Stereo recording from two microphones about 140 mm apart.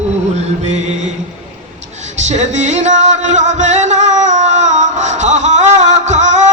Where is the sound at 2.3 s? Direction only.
55° right (ahead or behind).